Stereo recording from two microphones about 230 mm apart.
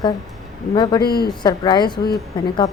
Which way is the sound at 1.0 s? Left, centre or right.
Left.